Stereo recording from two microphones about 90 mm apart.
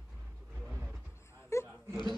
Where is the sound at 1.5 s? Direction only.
30° left (ahead or behind).